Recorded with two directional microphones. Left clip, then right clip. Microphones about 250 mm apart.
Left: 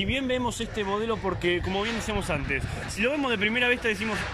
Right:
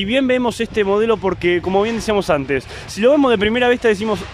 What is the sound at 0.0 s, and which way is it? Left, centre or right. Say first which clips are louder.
A man's voice: right 11 dB; right.